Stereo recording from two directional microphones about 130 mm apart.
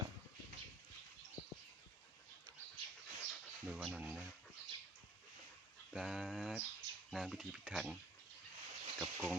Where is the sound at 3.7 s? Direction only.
5° right (ahead or behind).